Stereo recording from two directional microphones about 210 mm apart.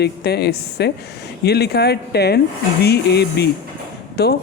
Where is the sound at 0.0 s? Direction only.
50° left (ahead or behind).